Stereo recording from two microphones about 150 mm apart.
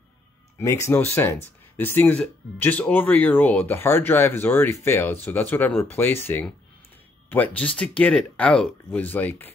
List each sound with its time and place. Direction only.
0.6 s speech: 20° left (ahead or behind)